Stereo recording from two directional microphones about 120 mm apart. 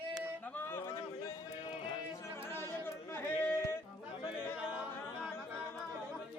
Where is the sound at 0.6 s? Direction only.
20° left (ahead or behind).